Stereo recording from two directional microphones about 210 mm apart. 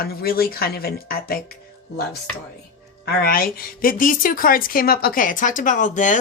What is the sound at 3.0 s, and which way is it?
A woman's voice, 45° left (ahead or behind).